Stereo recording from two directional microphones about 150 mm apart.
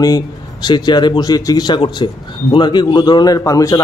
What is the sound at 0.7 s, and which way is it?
A man's voice, 30° left (ahead or behind).